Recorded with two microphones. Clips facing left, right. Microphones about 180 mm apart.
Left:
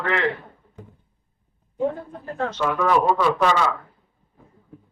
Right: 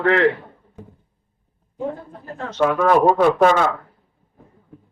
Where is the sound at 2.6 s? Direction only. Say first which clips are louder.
Right 5 dB; 50° right (ahead or behind).